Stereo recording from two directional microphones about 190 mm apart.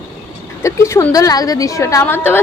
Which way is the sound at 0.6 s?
15° left (ahead or behind).